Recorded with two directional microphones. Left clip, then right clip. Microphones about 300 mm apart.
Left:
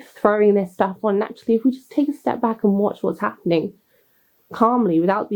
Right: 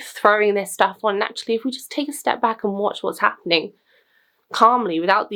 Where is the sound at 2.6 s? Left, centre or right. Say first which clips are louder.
Left 2 dB; right.